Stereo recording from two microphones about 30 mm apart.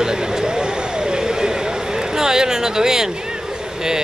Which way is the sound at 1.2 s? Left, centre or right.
Centre.